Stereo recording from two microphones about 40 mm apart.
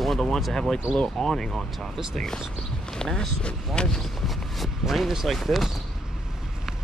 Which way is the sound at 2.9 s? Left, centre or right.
Centre.